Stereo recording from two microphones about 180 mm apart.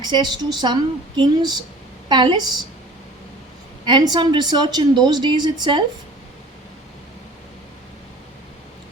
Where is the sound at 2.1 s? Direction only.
25° right (ahead or behind).